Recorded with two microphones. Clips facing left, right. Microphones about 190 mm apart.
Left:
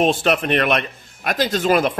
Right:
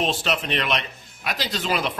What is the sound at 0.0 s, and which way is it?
Speech, 50° left (ahead or behind).